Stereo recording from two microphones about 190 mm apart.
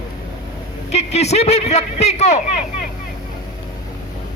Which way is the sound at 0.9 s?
35° left (ahead or behind).